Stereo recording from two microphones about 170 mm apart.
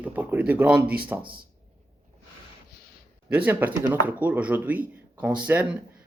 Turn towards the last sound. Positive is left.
turn(degrees=-10)  # may be behind; listen again after turning